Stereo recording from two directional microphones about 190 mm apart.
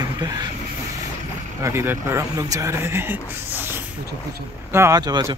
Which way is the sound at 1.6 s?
15° right (ahead or behind).